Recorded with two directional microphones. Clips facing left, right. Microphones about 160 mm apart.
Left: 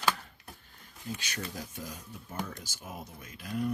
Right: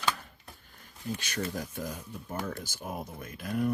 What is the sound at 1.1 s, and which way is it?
Speech, 50° right (ahead or behind).